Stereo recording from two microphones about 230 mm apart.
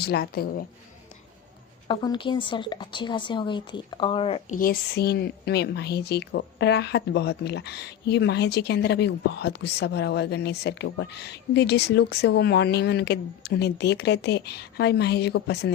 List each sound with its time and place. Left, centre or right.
0.0 s speech: left
1.9 s speech: centre; by 15.7 s left